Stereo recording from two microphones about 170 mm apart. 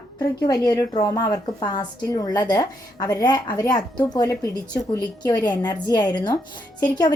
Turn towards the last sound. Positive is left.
turn(degrees=25)  # may be behind; listen again after turning